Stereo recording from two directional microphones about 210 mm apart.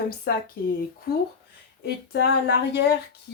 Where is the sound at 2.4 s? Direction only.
50° left (ahead or behind).